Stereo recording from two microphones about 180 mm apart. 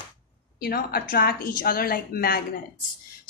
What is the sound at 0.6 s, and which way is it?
Speech, 55° left (ahead or behind).